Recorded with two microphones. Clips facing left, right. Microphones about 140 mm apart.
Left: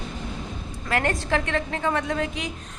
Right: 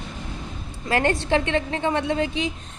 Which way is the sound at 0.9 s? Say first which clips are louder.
Right 3 dB; 30° right (ahead or behind).